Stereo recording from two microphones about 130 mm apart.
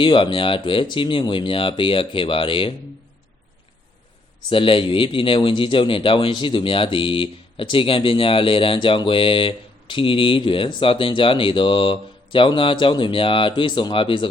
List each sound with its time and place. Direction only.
0.0 s speech: 40° left (ahead or behind)
4.4 s speech: 40° left (ahead or behind)